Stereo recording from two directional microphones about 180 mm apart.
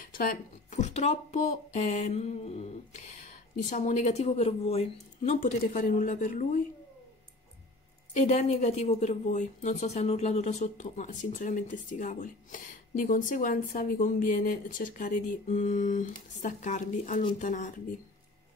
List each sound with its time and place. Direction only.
0.0 s speech: 50° left (ahead or behind)
8.1 s a woman's voice: 40° left (ahead or behind)